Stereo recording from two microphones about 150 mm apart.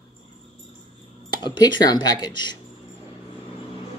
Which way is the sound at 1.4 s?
30° left (ahead or behind).